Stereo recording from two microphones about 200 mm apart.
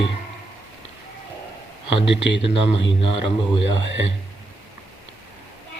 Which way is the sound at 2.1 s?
65° left (ahead or behind).